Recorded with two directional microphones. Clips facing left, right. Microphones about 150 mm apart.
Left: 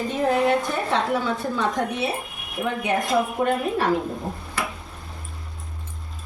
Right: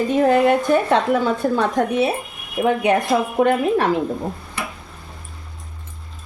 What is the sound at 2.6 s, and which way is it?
Speech, 70° right (ahead or behind).